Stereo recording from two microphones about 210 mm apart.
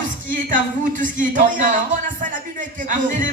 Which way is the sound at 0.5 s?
40° right (ahead or behind).